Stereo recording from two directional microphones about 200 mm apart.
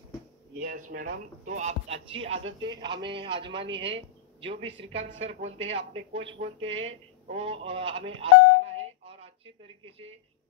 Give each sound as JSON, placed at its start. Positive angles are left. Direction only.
{"t": 0.6, "sound": "speech", "side_deg": -40}
{"t": 7.2, "sound": "telephone", "side_deg": -30}
{"t": 9.8, "sound": "speech", "side_deg": -30}